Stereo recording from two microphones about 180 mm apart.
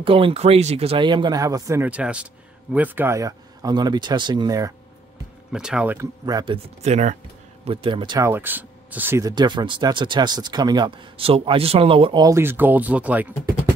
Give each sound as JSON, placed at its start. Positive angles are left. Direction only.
{"t": 0.0, "sound": "speech", "side_deg": -30}
{"t": 5.5, "sound": "speech", "side_deg": -5}
{"t": 6.2, "sound": "speech", "side_deg": -25}
{"t": 8.3, "sound": "speech", "side_deg": -10}